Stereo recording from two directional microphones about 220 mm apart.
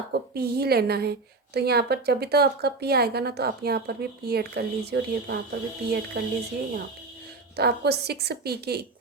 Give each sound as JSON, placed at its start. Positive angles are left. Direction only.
{"t": 0.1, "sound": "speech", "side_deg": -45}
{"t": 7.5, "sound": "speech", "side_deg": -45}